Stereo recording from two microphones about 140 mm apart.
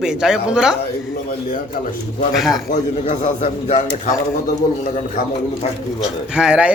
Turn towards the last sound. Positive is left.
turn(degrees=-5)  # may be behind; listen again after turning